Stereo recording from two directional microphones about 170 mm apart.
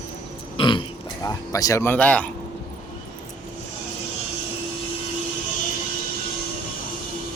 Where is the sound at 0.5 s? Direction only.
30° left (ahead or behind); by 2.3 s 10° left (ahead or behind).